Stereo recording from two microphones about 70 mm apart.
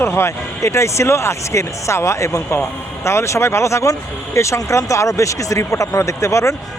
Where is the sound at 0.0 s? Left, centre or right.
Left.